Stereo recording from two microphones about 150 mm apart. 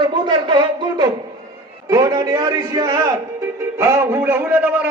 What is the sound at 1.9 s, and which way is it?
Music, 25° right (ahead or behind).